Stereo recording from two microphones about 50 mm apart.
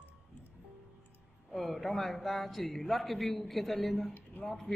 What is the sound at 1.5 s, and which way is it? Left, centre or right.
A man's voice, centre.